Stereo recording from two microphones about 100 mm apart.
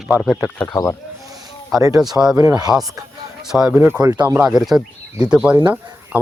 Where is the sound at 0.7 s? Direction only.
30° left (ahead or behind).